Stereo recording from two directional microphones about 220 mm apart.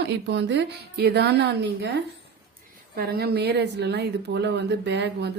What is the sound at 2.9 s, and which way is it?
A woman's voice, 45° right (ahead or behind).